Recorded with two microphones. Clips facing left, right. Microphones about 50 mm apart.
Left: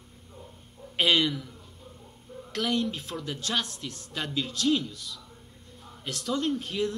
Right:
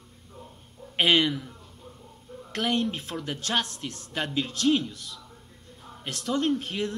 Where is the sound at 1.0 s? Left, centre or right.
Right.